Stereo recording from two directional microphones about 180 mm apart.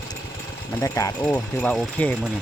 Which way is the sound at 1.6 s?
5° left (ahead or behind).